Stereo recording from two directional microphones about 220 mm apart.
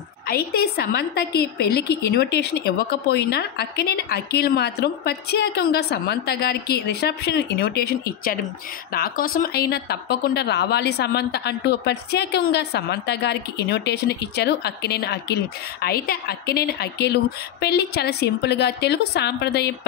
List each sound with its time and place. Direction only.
0.3 s a woman's voice: 45° left (ahead or behind)